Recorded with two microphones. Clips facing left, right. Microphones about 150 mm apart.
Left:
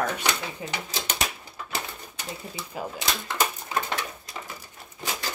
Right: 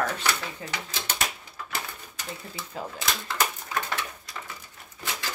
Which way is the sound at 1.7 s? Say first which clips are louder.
Left 2 dB; 25° left (ahead or behind).